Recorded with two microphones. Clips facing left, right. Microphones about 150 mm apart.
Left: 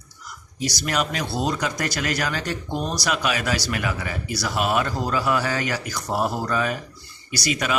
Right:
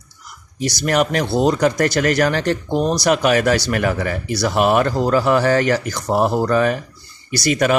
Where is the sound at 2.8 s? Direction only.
45° right (ahead or behind).